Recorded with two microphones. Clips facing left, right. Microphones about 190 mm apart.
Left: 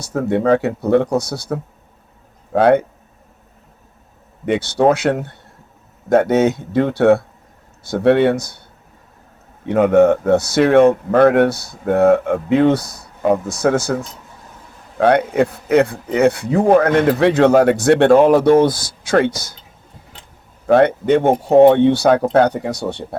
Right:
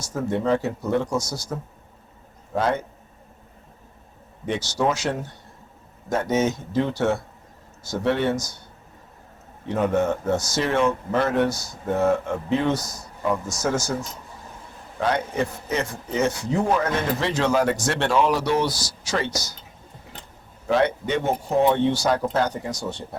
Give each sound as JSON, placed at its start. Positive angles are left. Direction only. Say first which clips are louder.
{"t": 0.0, "sound": "a man's voice", "louder": "left 7 dB", "side_deg": 65}
{"t": 4.4, "sound": "a man's voice", "louder": "left 9 dB", "side_deg": 60}
{"t": 9.6, "sound": "a man's voice", "louder": "left 10 dB", "side_deg": 65}
{"t": 20.7, "sound": "a man's voice", "louder": "left 9 dB", "side_deg": 55}